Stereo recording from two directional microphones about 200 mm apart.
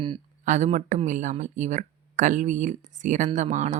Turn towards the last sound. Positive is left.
turn(degrees=-35)  # may be behind; listen again after turning